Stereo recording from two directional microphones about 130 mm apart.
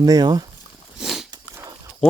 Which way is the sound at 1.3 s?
20° right (ahead or behind).